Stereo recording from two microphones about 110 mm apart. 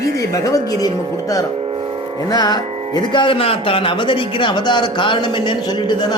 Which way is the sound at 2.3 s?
35° left (ahead or behind).